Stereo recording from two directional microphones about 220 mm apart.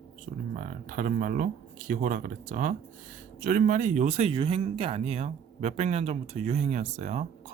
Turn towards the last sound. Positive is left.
turn(degrees=-30)  # may be behind; listen again after turning